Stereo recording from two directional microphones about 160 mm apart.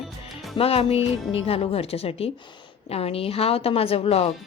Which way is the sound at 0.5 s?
35° left (ahead or behind).